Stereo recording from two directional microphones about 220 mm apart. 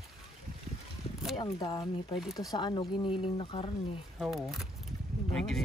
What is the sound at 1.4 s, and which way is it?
Speech, 20° left (ahead or behind).